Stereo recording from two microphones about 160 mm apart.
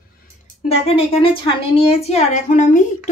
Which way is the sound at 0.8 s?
35° left (ahead or behind).